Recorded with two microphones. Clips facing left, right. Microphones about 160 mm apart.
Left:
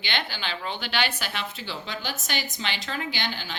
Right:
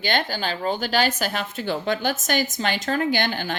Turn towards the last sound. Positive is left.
turn(degrees=-50)  # may be behind; listen again after turning